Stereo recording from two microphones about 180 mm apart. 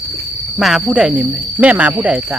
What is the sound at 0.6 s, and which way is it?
Speech, centre (ahead or behind).